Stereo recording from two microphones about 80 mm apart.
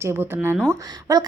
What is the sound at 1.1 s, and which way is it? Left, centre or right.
Speech, right.